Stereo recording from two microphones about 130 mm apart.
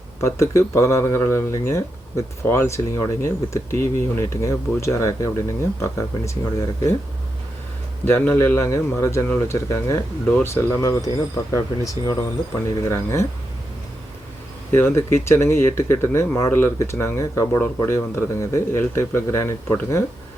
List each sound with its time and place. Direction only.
0.2 s speech: 20° left (ahead or behind)
8.0 s speech: 15° left (ahead or behind)
10.2 s speech: 10° left (ahead or behind)
10.5 s speech: 25° left (ahead or behind)
14.7 s speech: 20° left (ahead or behind)